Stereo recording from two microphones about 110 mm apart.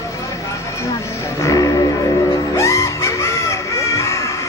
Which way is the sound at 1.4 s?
30° left (ahead or behind).